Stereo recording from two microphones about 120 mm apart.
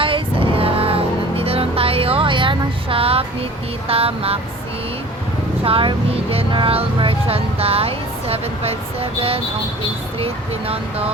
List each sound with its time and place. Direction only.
0.0 s music: 50° right (ahead or behind)
5.6 s speech: 50° right (ahead or behind)